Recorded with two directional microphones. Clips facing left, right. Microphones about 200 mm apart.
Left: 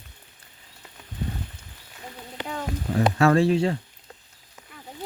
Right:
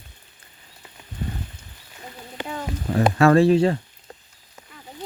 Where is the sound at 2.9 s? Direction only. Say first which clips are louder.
Right 3 dB; 60° right (ahead or behind).